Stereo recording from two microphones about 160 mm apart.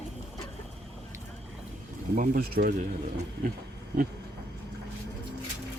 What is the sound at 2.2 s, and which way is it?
Speech, 65° right (ahead or behind).